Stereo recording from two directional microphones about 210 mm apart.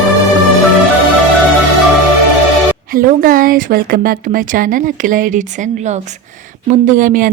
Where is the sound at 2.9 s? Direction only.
40° right (ahead or behind).